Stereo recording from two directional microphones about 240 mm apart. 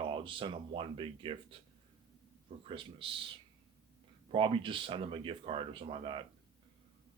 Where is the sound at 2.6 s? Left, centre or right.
Right.